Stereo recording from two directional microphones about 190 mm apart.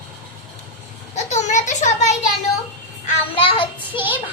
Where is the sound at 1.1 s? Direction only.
40° left (ahead or behind).